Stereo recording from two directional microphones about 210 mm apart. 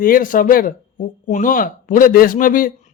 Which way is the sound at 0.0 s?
40° left (ahead or behind).